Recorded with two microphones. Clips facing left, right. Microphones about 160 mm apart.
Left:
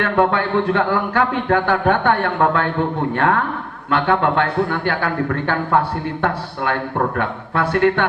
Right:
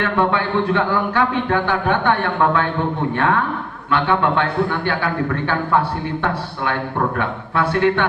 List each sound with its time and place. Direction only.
0.0 s a man's voice: 50° left (ahead or behind)
7.2 s a man's voice: 50° left (ahead or behind)